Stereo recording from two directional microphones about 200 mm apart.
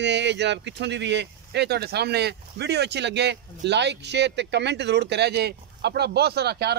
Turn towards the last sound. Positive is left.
turn(degrees=-55)  # may be behind; listen again after turning